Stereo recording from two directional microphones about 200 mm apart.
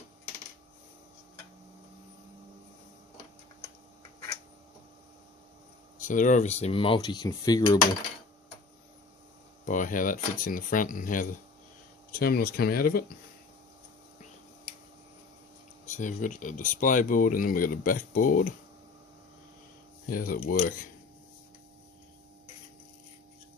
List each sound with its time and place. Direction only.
6.0 s a sound: 40° left (ahead or behind); by 7.8 s 20° left (ahead or behind)
9.6 s speech: 40° left (ahead or behind)
15.9 s speech: 40° left (ahead or behind)
20.1 s speech: 45° left (ahead or behind)